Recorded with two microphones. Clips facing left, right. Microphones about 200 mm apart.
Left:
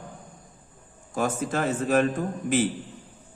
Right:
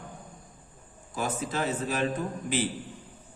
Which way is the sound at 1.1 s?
50° left (ahead or behind).